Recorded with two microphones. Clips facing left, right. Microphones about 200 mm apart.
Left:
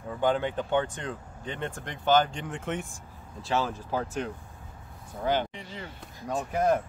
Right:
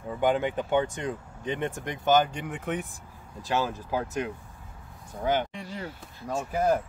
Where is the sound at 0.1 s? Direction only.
10° right (ahead or behind).